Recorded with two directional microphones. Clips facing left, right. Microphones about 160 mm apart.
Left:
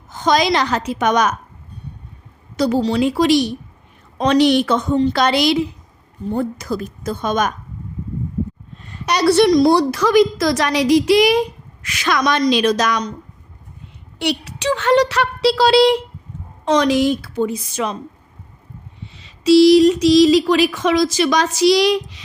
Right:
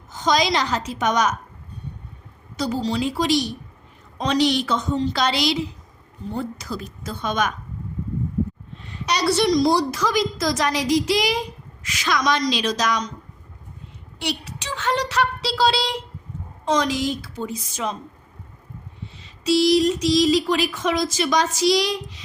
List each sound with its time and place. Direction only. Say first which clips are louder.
0.1 s a woman's voice: left 4 dB; 60° left (ahead or behind)
2.6 s a woman's voice: left 7 dB; 65° left (ahead or behind); by 7.5 s 45° left (ahead or behind)
8.8 s a woman's voice: left 6 dB; 50° left (ahead or behind)
14.2 s a woman's voice: left 7 dB; 65° left (ahead or behind)
19.1 s speech: left 9 dB; 80° left